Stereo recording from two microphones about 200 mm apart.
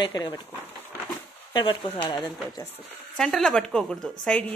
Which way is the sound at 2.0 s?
20° left (ahead or behind).